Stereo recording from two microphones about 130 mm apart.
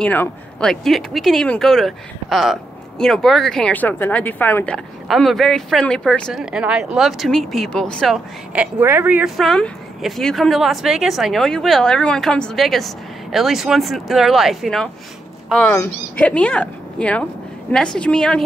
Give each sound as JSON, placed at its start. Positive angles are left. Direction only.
{"t": 0.0, "sound": "speech", "side_deg": 10}
{"t": 6.4, "sound": "speech", "side_deg": -5}
{"t": 8.5, "sound": "a woman's voice", "side_deg": -15}
{"t": 9.4, "sound": "speech", "side_deg": 5}
{"t": 15.6, "sound": "speech", "side_deg": 20}
{"t": 16.2, "sound": "speech", "side_deg": 10}